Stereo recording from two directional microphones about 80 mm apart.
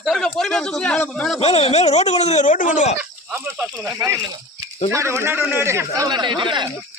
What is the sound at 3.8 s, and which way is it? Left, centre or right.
Speech, right.